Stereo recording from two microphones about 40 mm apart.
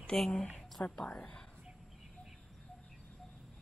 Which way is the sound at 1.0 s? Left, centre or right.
Left.